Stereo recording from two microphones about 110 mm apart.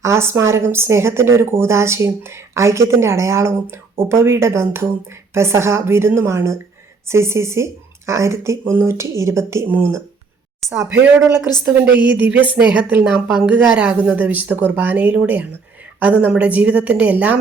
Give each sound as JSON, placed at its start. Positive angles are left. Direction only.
{"t": 0.0, "sound": "speech", "side_deg": -25}
{"t": 12.0, "sound": "speech", "side_deg": -15}